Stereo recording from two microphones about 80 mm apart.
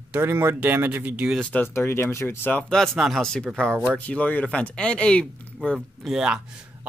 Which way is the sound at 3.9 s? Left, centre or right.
Centre.